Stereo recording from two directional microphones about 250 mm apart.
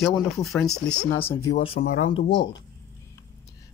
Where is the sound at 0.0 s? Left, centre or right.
Centre.